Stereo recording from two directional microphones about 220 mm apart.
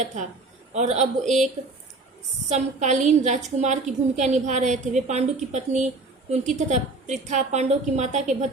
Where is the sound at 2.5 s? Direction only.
30° right (ahead or behind).